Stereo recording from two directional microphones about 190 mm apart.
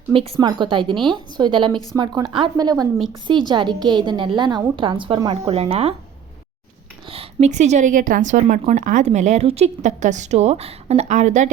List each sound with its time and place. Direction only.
0.1 s a woman's voice: 30° right (ahead or behind)
7.1 s a woman's voice: 35° right (ahead or behind)